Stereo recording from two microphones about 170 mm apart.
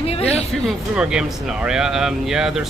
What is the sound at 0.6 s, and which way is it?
Speech, 5° right (ahead or behind).